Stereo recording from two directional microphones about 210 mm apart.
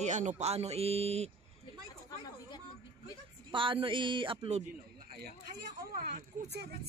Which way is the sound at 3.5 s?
25° right (ahead or behind).